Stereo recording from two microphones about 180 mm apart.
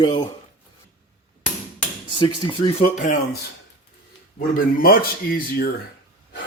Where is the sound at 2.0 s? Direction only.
25° left (ahead or behind).